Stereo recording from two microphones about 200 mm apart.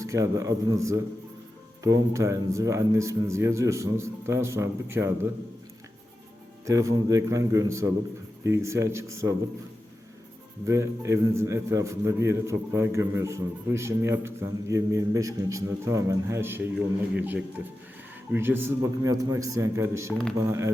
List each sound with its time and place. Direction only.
0.0 s a man's voice: 15° right (ahead or behind)
6.7 s a man's voice: 15° right (ahead or behind)
10.7 s a man's voice: 15° right (ahead or behind)